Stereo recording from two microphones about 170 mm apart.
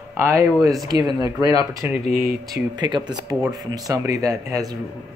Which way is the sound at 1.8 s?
10° right (ahead or behind).